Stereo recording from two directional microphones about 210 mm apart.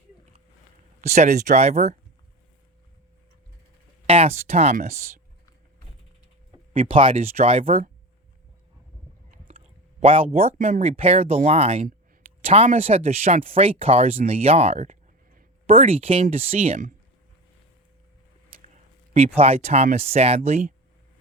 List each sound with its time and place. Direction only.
1.0 s speech: 30° right (ahead or behind)
4.0 s speech: 25° right (ahead or behind)
6.7 s speech: 25° right (ahead or behind)
10.0 s speech: 25° right (ahead or behind)
19.4 s speech: 30° right (ahead or behind)